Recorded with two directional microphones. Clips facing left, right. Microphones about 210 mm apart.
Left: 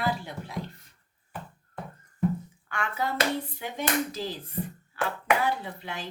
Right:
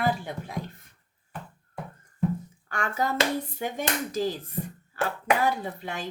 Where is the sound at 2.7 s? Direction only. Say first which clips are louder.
Right 2 dB; 40° right (ahead or behind).